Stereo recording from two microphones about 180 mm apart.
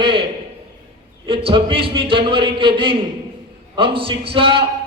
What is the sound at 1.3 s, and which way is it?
A man's voice, 30° right (ahead or behind).